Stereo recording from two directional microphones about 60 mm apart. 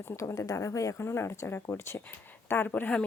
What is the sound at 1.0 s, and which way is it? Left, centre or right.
Speech, left.